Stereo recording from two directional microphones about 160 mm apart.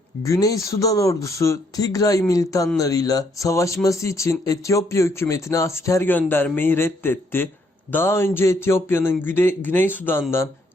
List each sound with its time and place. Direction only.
0.3 s speech: 20° left (ahead or behind)